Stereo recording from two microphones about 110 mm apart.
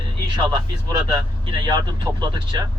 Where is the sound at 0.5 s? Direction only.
45° right (ahead or behind).